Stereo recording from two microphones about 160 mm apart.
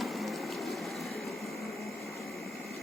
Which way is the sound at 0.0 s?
Centre (ahead or behind).